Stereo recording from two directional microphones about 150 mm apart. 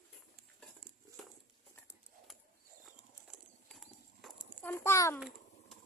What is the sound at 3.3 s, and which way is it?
Clip-clop, centre (ahead or behind).